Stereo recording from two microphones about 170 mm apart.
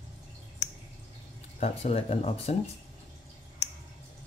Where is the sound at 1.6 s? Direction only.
40° left (ahead or behind).